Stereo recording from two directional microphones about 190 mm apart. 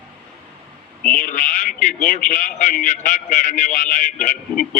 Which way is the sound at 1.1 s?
45° left (ahead or behind).